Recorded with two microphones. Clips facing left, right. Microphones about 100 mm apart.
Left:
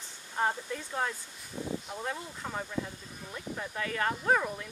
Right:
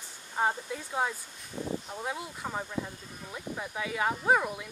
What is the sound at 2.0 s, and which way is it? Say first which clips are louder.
Speech: right 1 dB; 10° right (ahead or behind).